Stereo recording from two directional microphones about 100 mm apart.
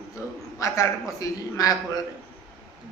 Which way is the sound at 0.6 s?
35° left (ahead or behind).